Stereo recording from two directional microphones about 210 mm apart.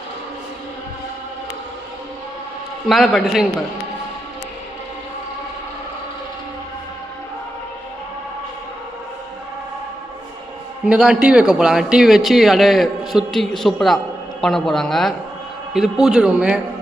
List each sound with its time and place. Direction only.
2.9 s a man's voice: centre (ahead or behind)
10.8 s a man's voice: 5° right (ahead or behind)